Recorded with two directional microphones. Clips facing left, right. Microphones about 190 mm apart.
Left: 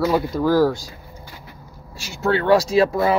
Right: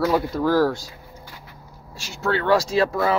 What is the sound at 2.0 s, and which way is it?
Speech, 15° left (ahead or behind).